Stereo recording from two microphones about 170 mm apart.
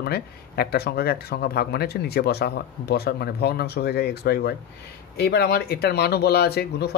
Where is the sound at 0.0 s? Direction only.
65° left (ahead or behind).